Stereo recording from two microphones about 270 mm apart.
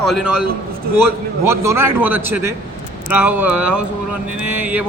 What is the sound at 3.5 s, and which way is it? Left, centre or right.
Speech, right.